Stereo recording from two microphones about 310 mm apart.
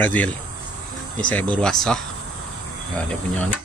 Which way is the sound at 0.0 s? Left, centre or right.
Centre.